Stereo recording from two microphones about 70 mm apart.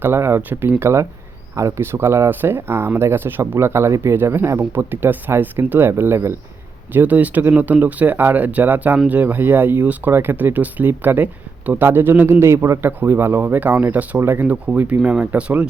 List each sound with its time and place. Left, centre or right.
0.0 s speech: right
6.9 s speech: right
12.8 s speech: right